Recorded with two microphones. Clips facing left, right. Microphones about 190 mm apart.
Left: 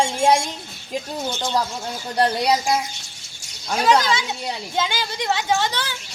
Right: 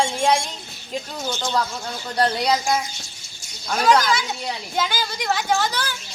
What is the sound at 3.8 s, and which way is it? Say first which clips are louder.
A woman's voice: even; 20° left (ahead or behind).